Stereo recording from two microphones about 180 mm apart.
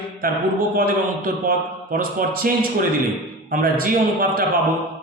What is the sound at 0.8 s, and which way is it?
A man's voice, 55° right (ahead or behind).